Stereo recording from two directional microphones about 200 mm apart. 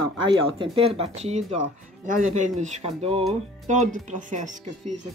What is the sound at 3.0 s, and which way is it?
Speech, 30° right (ahead or behind).